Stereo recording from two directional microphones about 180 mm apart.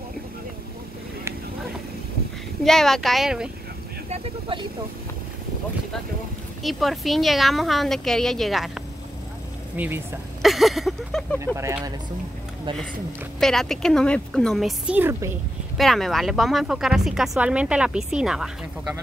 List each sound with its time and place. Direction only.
2.6 s speech: centre (ahead or behind)
4.1 s speech: 30° right (ahead or behind)
6.6 s speech: centre (ahead or behind)
9.8 s speech: 10° right (ahead or behind)
10.4 s a sound: centre (ahead or behind)
11.3 s speech: 15° right (ahead or behind)
13.4 s speech: centre (ahead or behind); by 15.3 s 15° right (ahead or behind)
15.8 s speech: centre (ahead or behind)